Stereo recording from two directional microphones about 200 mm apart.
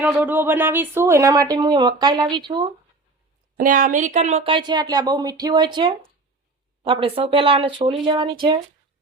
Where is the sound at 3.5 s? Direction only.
40° right (ahead or behind); by 8.3 s 25° right (ahead or behind).